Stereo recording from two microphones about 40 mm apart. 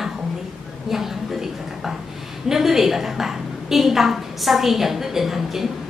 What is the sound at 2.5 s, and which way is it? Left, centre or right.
A woman's voice, centre.